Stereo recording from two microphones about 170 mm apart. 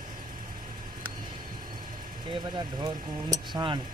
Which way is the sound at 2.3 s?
25° right (ahead or behind).